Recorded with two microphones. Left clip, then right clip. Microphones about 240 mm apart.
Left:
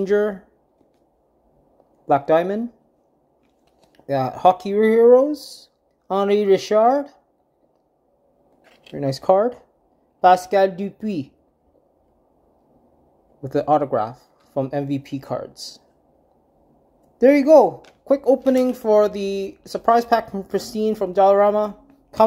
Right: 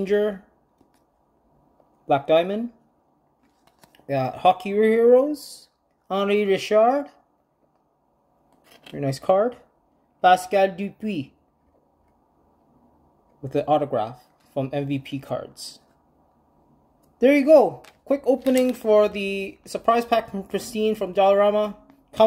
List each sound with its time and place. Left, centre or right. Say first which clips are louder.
0.0 s speech: left 3 dB; centre
2.0 s speech: left 2 dB; centre
3.9 s speech: left 3 dB; centre
8.9 s speech: left 3 dB; centre
13.4 s speech: left 3 dB; centre
17.2 s speech: left 3 dB; centre